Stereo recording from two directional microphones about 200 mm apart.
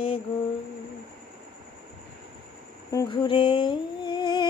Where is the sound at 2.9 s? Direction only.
20° left (ahead or behind).